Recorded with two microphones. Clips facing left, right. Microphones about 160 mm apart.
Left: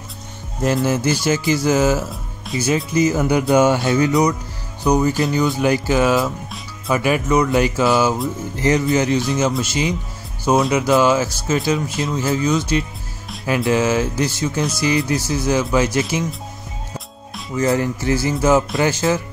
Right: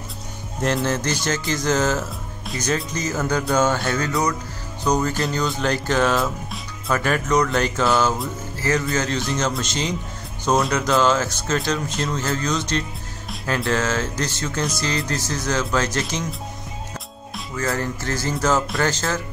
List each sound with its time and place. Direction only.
0.6 s speech: centre (ahead or behind)
8.5 s speech: 20° left (ahead or behind)
9.2 s speech: centre (ahead or behind)
17.6 s speech: 15° left (ahead or behind)